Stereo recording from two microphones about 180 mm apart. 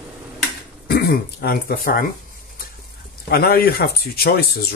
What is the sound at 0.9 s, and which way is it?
Speech, 60° left (ahead or behind).